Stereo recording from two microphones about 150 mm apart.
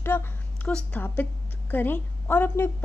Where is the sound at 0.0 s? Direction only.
15° left (ahead or behind).